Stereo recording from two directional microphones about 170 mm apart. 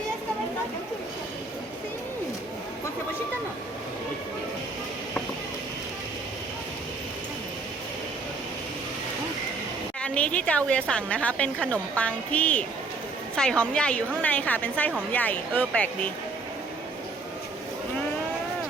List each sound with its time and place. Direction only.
10.0 s a woman's voice: 5° left (ahead or behind)